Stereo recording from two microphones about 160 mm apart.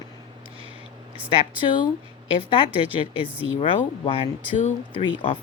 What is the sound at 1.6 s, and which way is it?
Speech, 30° left (ahead or behind).